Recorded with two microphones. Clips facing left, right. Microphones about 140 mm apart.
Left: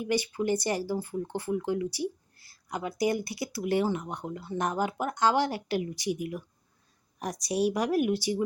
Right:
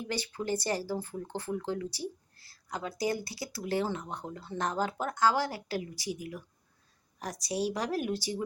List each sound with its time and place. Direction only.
0.0 s speech: 10° left (ahead or behind)